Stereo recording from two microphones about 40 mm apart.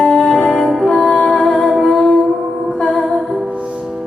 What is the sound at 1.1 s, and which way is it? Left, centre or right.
Music, left.